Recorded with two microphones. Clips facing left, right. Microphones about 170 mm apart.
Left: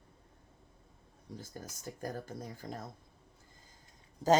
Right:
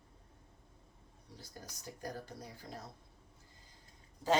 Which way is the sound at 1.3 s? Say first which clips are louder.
Left 6 dB; 50° left (ahead or behind).